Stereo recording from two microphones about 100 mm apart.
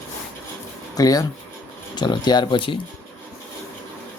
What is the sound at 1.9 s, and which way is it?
Speech, 45° left (ahead or behind).